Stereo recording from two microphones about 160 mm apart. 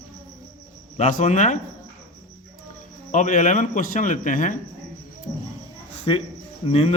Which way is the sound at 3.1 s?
50° left (ahead or behind).